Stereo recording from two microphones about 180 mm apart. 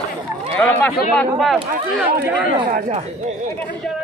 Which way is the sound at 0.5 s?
10° left (ahead or behind).